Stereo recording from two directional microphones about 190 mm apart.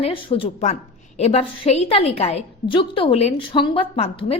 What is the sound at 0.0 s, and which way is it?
A woman's voice, 30° left (ahead or behind).